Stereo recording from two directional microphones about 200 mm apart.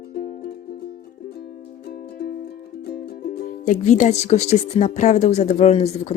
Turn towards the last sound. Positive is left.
turn(degrees=30)  # may be behind; listen again after turning